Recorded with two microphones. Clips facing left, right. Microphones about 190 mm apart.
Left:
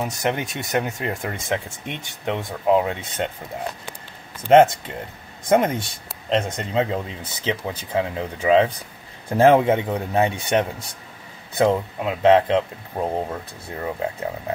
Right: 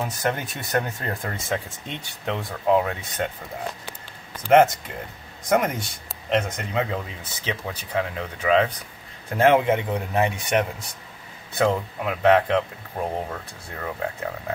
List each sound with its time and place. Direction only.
0.0 s speech: 15° left (ahead or behind)
4.5 s speech: 25° left (ahead or behind)